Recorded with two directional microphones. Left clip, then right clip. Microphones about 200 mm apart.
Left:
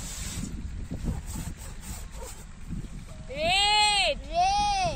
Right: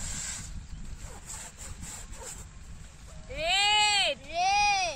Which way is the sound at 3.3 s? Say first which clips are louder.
Left 2 dB; 5° left (ahead or behind).